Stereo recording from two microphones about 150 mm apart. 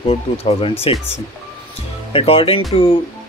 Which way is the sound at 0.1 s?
40° left (ahead or behind).